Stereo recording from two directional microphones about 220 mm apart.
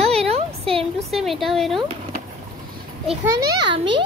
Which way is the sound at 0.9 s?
Centre (ahead or behind).